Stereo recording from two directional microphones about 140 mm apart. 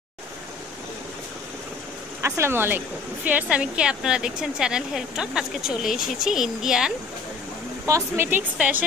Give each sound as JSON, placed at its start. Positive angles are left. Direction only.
{"t": 2.2, "sound": "speech", "side_deg": -20}
{"t": 7.8, "sound": "speech", "side_deg": -20}